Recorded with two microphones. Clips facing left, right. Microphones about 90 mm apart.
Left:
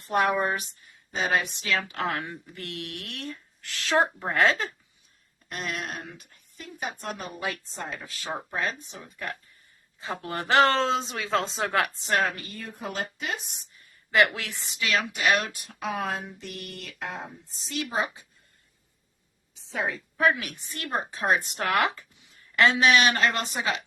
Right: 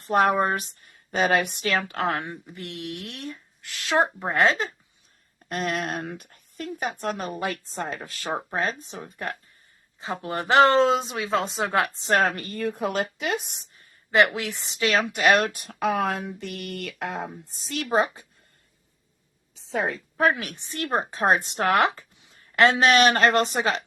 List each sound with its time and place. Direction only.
0.0 s speech: 40° right (ahead or behind); by 2.0 s 55° right (ahead or behind)
2.0 s a woman's voice: 35° right (ahead or behind)
2.2 s speech: 20° right (ahead or behind)
5.5 s speech: 50° right (ahead or behind)
10.0 s speech: 20° right (ahead or behind)
11.9 s speech: 40° right (ahead or behind); by 13.6 s 65° right (ahead or behind)
13.7 s a woman's voice: 30° right (ahead or behind)
14.8 s speech: 40° right (ahead or behind)
15.6 s speech: 55° right (ahead or behind)
19.5 s a woman's voice: 40° right (ahead or behind)
21.5 s speech: 30° right (ahead or behind)